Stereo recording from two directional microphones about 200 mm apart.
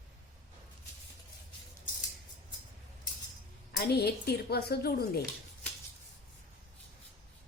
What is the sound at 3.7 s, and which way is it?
A woman's voice, 55° left (ahead or behind).